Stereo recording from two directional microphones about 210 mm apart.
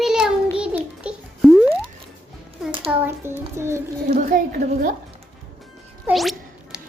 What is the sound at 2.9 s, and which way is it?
Speech, 5° right (ahead or behind).